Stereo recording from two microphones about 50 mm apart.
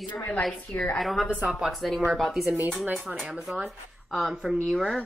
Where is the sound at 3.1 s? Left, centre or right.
Centre.